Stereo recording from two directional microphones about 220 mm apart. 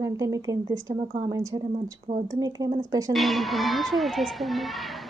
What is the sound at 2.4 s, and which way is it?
Speech, 15° right (ahead or behind).